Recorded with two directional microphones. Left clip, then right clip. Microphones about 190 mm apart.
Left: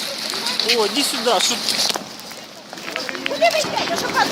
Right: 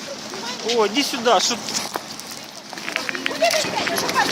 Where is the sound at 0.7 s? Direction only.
20° right (ahead or behind).